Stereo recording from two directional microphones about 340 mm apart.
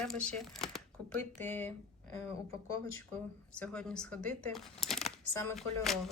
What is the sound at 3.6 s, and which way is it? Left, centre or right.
Speech, centre.